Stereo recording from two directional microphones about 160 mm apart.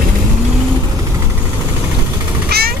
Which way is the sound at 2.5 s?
90° right.